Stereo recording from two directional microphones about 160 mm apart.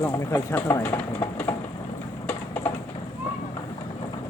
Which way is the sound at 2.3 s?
10° left (ahead or behind).